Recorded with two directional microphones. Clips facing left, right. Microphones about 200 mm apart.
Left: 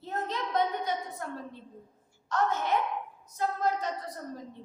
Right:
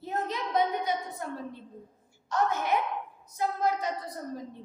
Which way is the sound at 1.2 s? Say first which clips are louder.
Right 2 dB; 10° right (ahead or behind).